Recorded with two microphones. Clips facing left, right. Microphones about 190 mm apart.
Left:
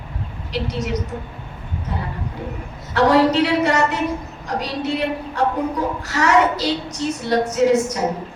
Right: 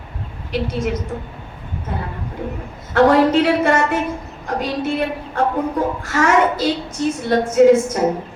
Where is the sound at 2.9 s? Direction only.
50° right (ahead or behind).